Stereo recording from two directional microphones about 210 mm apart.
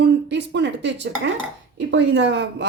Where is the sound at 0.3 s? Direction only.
55° right (ahead or behind).